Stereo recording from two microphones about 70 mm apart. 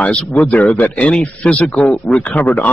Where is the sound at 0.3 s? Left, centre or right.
Left.